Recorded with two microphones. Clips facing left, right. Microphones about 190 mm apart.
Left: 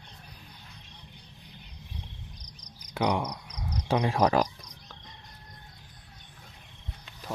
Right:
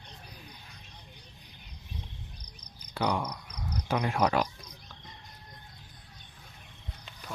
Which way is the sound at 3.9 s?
30° left (ahead or behind).